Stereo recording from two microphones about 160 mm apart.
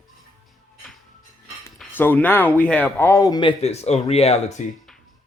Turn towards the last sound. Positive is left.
turn(degrees=45)  # may be behind; listen again after turning